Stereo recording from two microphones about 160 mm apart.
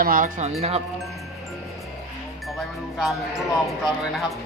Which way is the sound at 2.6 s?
Centre (ahead or behind).